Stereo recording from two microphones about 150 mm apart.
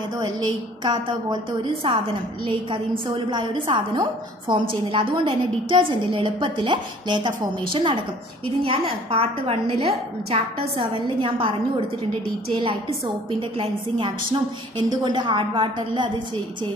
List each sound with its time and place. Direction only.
0.2 s a woman's voice: 30° right (ahead or behind)
12.5 s a woman's voice: 35° right (ahead or behind)